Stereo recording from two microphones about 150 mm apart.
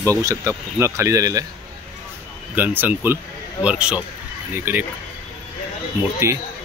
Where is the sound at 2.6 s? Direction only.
10° right (ahead or behind).